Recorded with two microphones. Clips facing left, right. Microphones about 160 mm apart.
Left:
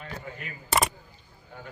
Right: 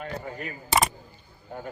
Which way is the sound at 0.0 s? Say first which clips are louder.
Right 5 dB; 40° right (ahead or behind).